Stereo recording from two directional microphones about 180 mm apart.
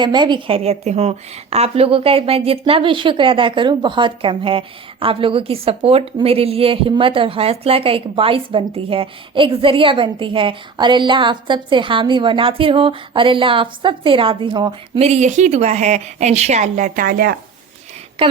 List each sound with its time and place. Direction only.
0.0 s a woman's voice: 25° right (ahead or behind)
15.0 s a woman's voice: 40° right (ahead or behind); by 17.3 s 55° right (ahead or behind)
18.2 s a woman's voice: 30° right (ahead or behind)